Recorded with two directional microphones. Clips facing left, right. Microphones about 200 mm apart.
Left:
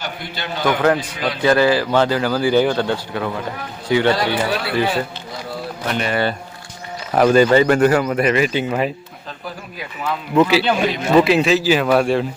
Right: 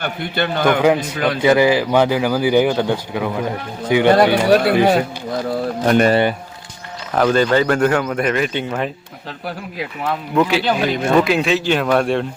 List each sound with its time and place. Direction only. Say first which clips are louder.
0.0 s a man's voice: right 7 dB; 55° right (ahead or behind)
1.4 s a man's voice: right 1 dB; 15° right (ahead or behind)
4.1 s speech: right 7 dB; 50° right (ahead or behind)
7.1 s speech: left 2 dB; 10° left (ahead or behind)
10.3 s a man's voice: left 2 dB; centre (ahead or behind)